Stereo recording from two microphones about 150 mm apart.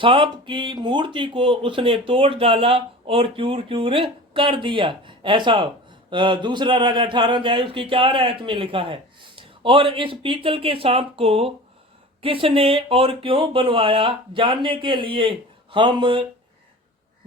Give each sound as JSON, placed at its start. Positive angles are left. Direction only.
{"t": 0.0, "sound": "speech", "side_deg": -35}